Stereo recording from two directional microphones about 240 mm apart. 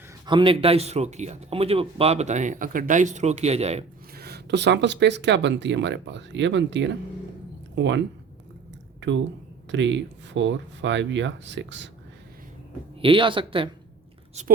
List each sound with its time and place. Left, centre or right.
0.3 s speech: right
4.1 s speech: right
13.0 s speech: right